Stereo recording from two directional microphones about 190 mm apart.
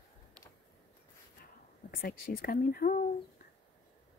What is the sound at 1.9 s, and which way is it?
Speech, 50° left (ahead or behind).